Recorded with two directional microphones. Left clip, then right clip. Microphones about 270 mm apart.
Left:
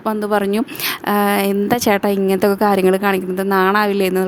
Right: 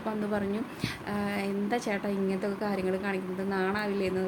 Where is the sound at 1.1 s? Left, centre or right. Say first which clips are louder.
Left 18 dB; left.